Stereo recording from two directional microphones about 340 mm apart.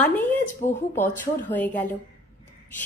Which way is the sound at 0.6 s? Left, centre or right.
Left.